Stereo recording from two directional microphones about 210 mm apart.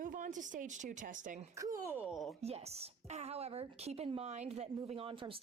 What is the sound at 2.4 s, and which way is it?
A woman's voice, 30° right (ahead or behind).